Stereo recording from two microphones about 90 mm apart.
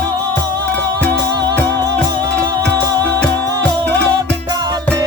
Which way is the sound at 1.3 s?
50° right (ahead or behind).